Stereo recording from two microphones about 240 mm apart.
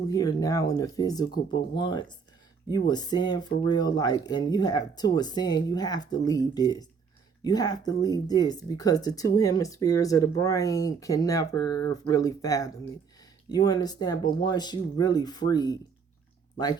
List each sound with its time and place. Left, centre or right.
0.1 s speech: centre